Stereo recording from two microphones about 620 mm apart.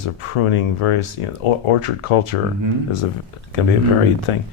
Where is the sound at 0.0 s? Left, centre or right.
Left.